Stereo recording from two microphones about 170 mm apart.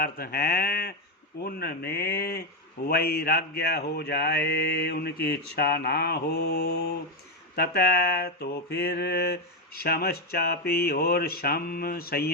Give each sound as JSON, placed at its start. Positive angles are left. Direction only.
{"t": 0.0, "sound": "mantra", "side_deg": 65}